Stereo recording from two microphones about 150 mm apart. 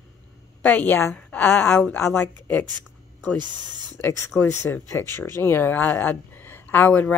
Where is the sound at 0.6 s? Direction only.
10° left (ahead or behind).